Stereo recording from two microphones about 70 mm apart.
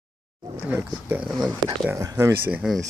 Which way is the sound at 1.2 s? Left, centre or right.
Centre.